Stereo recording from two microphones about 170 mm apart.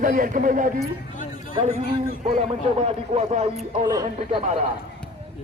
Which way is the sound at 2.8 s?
40° right (ahead or behind).